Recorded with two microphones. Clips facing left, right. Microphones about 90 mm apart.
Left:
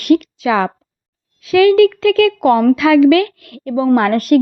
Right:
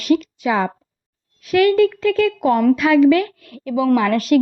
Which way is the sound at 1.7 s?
90° left.